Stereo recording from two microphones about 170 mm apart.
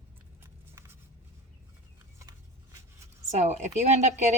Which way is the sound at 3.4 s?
40° right (ahead or behind).